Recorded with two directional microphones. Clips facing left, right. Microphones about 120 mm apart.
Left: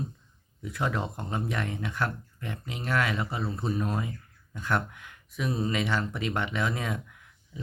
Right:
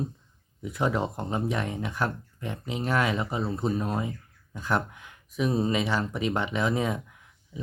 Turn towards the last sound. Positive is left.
turn(degrees=-25)  # may be behind; listen again after turning